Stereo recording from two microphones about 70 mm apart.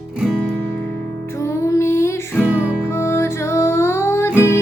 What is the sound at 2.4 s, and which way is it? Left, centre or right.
Music, right.